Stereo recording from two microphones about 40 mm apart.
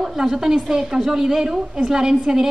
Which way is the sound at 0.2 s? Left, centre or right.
Centre.